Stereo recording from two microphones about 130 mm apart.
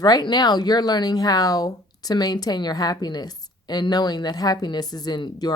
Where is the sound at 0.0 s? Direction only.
35° left (ahead or behind).